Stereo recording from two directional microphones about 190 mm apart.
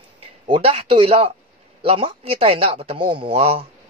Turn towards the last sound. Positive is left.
turn(degrees=-30)  # may be behind; listen again after turning